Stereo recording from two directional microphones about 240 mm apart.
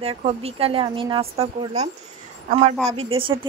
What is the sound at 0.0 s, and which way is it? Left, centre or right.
A woman's voice, right.